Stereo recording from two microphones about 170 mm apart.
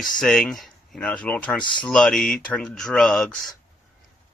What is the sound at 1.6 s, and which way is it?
Speech, 25° left (ahead or behind).